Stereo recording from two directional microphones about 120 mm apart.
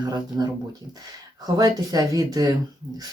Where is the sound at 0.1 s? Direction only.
35° right (ahead or behind).